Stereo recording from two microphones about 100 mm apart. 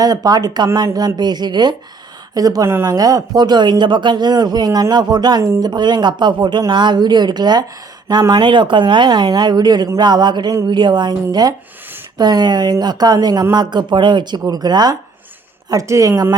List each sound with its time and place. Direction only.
0.0 s a man's voice: 40° right (ahead or behind)